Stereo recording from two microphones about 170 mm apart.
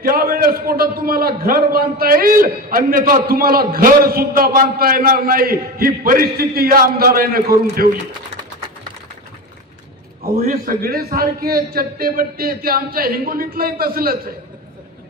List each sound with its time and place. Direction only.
0.0 s a man's voice: 60° right (ahead or behind)
10.2 s a man's voice: 60° right (ahead or behind)